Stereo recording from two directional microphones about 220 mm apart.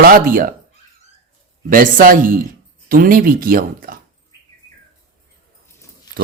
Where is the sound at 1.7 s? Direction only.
40° right (ahead or behind).